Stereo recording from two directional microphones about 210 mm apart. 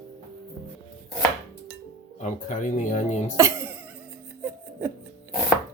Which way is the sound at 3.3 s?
10° right (ahead or behind).